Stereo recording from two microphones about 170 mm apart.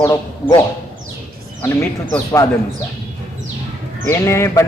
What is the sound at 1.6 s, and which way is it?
Speech, 15° left (ahead or behind).